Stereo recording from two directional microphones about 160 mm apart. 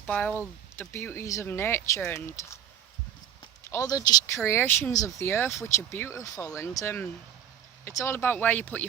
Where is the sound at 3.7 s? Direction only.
20° left (ahead or behind).